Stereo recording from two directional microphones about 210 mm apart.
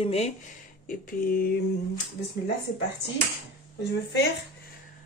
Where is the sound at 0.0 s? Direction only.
30° left (ahead or behind).